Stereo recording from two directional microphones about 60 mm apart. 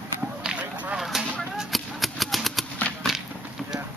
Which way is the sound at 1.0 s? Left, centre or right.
Centre.